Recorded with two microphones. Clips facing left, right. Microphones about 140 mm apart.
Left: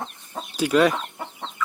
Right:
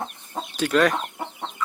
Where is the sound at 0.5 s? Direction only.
10° left (ahead or behind).